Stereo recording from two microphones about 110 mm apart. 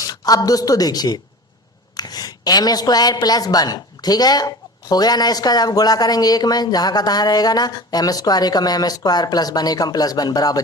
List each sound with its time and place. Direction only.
0.1 s a woman's voice: 35° left (ahead or behind)